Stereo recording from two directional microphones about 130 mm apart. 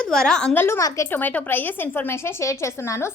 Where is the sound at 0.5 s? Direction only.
20° left (ahead or behind).